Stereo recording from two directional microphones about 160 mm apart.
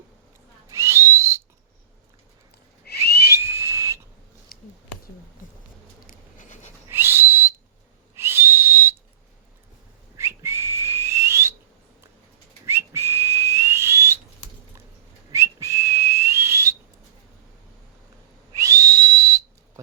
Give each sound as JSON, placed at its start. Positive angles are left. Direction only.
{"t": 0.7, "sound": "whistle", "side_deg": -15}
{"t": 2.8, "sound": "whistling", "side_deg": 85}
{"t": 3.4, "sound": "whistle", "side_deg": -15}
{"t": 4.5, "sound": "a sound", "side_deg": 65}
{"t": 6.1, "sound": "a sound", "side_deg": 55}
{"t": 6.8, "sound": "whistle", "side_deg": -15}
{"t": 10.2, "sound": "whistling", "side_deg": -15}
{"t": 12.6, "sound": "whistling", "side_deg": -15}
{"t": 15.3, "sound": "whistling", "side_deg": -20}
{"t": 18.5, "sound": "whistle", "side_deg": -20}